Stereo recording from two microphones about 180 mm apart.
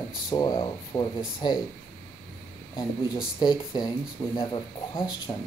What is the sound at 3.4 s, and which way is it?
Speech, 25° left (ahead or behind).